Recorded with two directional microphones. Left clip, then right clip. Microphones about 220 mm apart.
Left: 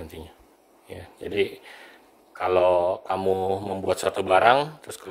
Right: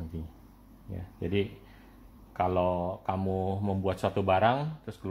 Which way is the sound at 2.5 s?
45° left (ahead or behind).